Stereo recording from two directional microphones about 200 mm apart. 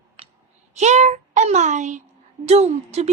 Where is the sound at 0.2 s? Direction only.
30° right (ahead or behind).